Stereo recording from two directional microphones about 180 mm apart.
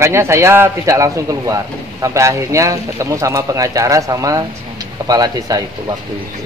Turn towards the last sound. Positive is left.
turn(degrees=-20)  # may be behind; listen again after turning